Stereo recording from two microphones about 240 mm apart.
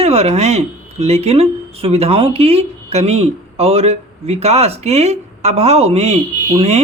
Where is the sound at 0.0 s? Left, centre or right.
Right.